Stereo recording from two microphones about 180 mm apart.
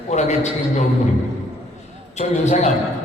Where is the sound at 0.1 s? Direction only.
40° left (ahead or behind).